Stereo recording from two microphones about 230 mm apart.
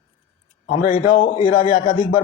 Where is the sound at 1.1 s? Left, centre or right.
Left.